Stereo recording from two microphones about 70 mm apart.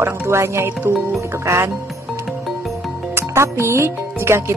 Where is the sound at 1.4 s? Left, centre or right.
Right.